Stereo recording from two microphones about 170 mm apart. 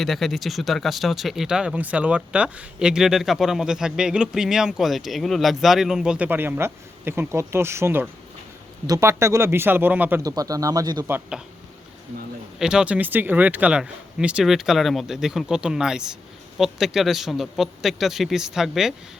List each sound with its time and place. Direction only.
0.0 s speech: centre (ahead or behind)
10.2 s speech: 20° right (ahead or behind)
11.1 s speech: 5° right (ahead or behind)
12.5 s speech: 5° right (ahead or behind)